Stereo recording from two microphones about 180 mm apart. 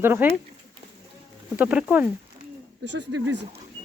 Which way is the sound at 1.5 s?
10° right (ahead or behind).